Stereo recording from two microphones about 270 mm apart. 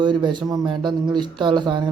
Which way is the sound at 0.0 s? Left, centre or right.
Centre.